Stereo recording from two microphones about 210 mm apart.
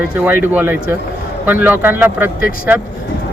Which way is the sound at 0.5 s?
10° right (ahead or behind).